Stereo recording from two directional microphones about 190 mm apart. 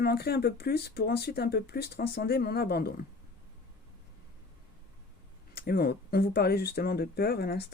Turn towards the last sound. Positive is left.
turn(degrees=55)  # may be behind; listen again after turning